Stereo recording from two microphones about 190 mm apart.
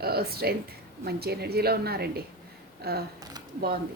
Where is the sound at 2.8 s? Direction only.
55° right (ahead or behind).